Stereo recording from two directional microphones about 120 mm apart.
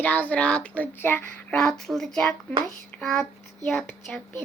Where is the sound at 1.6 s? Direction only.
5° left (ahead or behind).